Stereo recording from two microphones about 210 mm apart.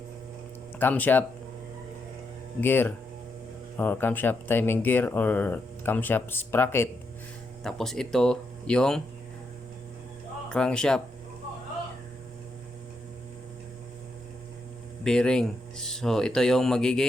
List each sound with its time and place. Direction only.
0.8 s speech: 10° left (ahead or behind)
2.6 s speech: 10° left (ahead or behind)
10.5 s speech: 5° left (ahead or behind)
15.0 s speech: 5° left (ahead or behind)